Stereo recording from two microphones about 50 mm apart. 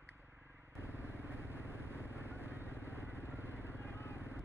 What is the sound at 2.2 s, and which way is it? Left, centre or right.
Vehicle, right.